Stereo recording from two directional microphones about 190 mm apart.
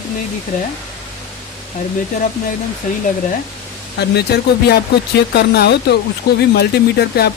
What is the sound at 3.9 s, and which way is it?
Speech, 60° left (ahead or behind).